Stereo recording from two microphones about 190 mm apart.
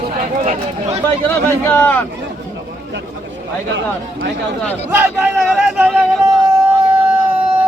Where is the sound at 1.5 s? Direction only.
10° left (ahead or behind).